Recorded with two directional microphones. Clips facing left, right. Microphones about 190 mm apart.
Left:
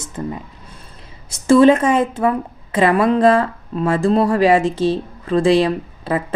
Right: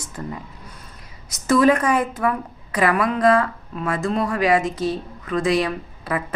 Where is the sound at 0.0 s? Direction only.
25° left (ahead or behind).